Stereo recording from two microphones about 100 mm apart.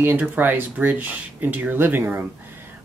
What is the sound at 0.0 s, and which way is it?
Speech, 20° right (ahead or behind).